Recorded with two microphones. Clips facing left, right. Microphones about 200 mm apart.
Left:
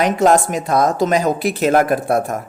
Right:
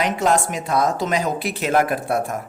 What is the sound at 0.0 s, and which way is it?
Speech, 45° left (ahead or behind).